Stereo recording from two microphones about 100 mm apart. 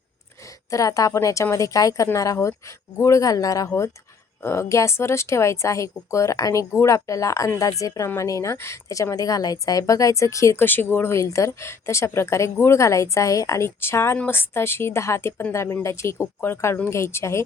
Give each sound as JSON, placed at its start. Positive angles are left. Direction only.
{"t": 0.7, "sound": "speech", "side_deg": 35}